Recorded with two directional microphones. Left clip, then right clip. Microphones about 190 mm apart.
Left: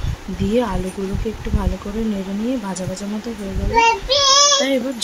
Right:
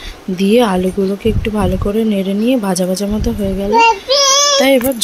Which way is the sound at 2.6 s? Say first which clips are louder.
Right 11 dB; 30° right (ahead or behind).